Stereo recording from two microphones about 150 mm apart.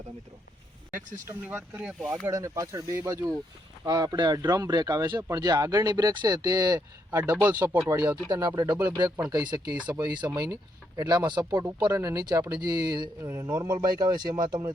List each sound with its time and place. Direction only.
1.3 s speech: 15° right (ahead or behind)
2.2 s speech: 20° right (ahead or behind)